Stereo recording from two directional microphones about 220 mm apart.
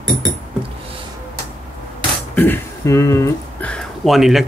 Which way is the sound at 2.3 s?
10° left (ahead or behind).